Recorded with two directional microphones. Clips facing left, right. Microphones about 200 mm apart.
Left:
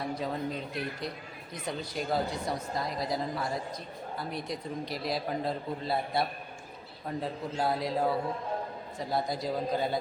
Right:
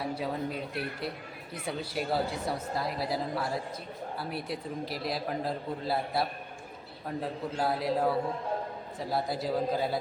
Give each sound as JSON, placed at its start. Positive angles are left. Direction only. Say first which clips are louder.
{"t": 0.0, "sound": "a woman's voice", "louder": "even", "side_deg": -10}